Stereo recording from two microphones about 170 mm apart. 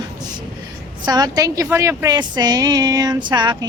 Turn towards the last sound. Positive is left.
turn(degrees=-25)  # may be behind; listen again after turning